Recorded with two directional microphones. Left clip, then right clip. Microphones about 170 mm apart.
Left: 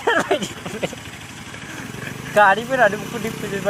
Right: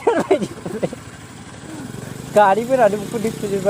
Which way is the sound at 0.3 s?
65° right (ahead or behind).